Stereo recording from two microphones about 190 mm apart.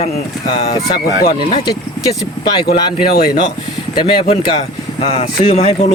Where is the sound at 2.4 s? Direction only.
25° left (ahead or behind).